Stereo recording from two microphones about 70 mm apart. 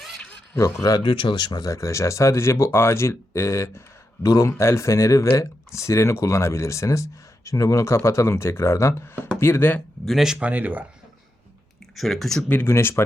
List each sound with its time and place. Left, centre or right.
0.5 s speech: left
0.9 s speech: left
1.6 s speech: left
10.1 s speech: centre
10.4 s speech: right
11.9 s speech: centre
12.6 s speech: left